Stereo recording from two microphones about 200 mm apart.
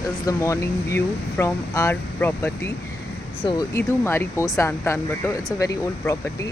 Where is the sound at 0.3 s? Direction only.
15° left (ahead or behind).